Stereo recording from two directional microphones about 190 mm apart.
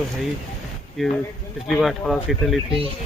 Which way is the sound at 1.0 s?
Centre (ahead or behind).